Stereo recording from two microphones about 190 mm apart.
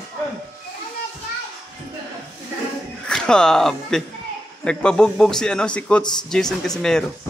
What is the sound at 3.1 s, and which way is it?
Speech, 5° left (ahead or behind).